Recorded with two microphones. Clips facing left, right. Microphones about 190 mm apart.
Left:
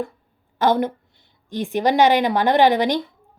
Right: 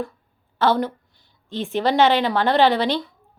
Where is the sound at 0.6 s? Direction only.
15° left (ahead or behind).